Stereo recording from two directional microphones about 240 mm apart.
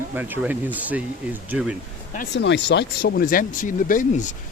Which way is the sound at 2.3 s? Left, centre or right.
Left.